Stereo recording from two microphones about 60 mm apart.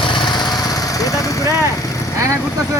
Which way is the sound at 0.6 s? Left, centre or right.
Left.